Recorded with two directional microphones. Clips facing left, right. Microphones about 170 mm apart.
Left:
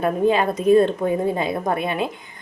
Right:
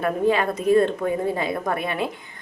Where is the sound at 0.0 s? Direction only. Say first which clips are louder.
Left 2 dB; 25° left (ahead or behind).